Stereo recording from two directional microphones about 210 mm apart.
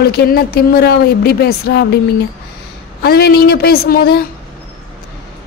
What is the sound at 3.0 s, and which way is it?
Speech, 50° left (ahead or behind).